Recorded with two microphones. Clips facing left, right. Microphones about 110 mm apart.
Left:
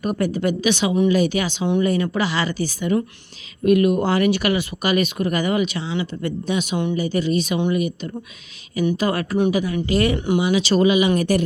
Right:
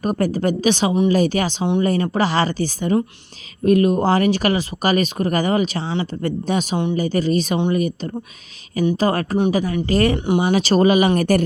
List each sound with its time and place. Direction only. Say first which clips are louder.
0.0 s speech: right 2 dB; 40° right (ahead or behind)
10.2 s speech: right 1 dB; 25° right (ahead or behind)
10.4 s speech: right 2 dB; 40° right (ahead or behind)